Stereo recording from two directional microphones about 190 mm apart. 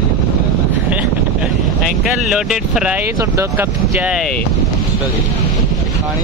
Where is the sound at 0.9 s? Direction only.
5° right (ahead or behind).